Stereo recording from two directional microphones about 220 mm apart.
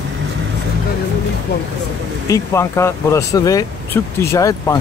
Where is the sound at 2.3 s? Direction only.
15° left (ahead or behind).